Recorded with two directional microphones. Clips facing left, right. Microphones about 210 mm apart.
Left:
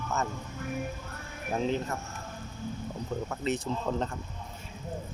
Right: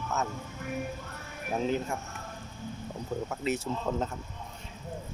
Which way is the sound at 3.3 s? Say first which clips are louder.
Left 1 dB; 10° right (ahead or behind).